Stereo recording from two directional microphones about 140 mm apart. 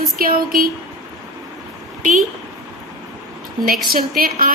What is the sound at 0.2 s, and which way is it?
Speech, 90° right.